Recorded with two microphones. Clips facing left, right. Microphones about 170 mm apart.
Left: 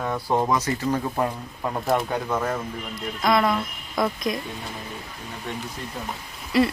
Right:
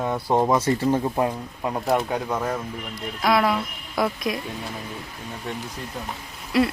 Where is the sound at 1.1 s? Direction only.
15° right (ahead or behind).